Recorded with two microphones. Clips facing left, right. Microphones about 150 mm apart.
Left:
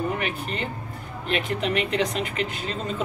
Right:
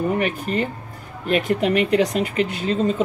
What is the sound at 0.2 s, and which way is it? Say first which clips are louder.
Speech: right 7 dB; 45° right (ahead or behind).